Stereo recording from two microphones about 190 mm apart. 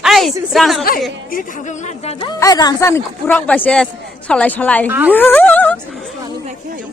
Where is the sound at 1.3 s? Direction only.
45° left (ahead or behind).